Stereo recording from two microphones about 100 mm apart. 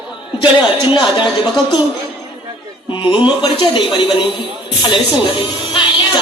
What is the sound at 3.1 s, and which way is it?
Speech, 50° left (ahead or behind).